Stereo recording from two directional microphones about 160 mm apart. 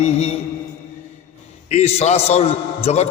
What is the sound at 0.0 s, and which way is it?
Speech, 40° left (ahead or behind).